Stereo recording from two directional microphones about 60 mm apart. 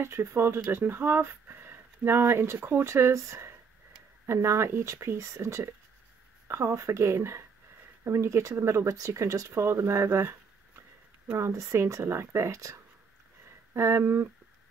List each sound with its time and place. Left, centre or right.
0.0 s speech: right
11.3 s speech: right
13.7 s speech: right